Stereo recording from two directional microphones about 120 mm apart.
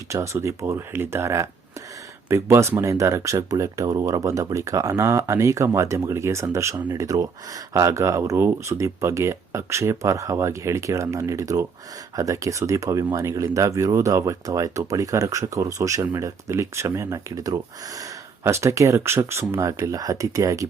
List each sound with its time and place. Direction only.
0.1 s speech: 25° right (ahead or behind)